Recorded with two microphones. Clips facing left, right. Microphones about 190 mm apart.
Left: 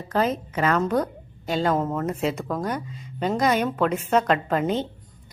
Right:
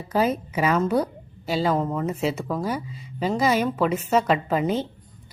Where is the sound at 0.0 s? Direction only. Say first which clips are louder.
Right 1 dB; 10° right (ahead or behind).